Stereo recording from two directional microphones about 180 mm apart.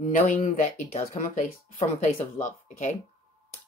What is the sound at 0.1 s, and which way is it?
Speech, 45° left (ahead or behind).